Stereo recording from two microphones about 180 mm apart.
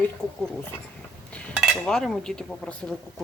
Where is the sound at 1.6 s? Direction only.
Centre (ahead or behind).